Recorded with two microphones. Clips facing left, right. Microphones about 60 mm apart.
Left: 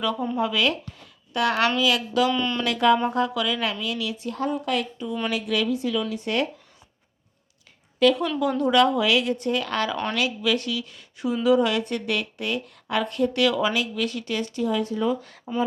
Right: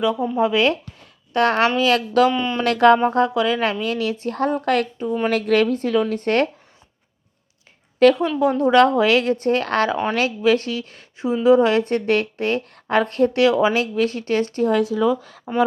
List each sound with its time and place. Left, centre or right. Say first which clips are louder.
0.0 s speech: right 6 dB; centre
0.3 s a woman's voice: right 7 dB; right
2.3 s speech: right 3 dB; right
2.6 s a sound: right 6 dB; right
3.0 s speech: right 6 dB; right
4.9 s speech: right 6 dB; right
5.3 s a woman's voice: right 7 dB; right
7.9 s speech: right 6 dB; right
8.4 s speech: right 5 dB; right
8.7 s a woman's voice: right 5 dB; right
15.5 s speech: right 6 dB; right